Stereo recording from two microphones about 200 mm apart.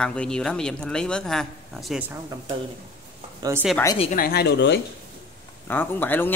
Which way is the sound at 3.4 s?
10° right (ahead or behind).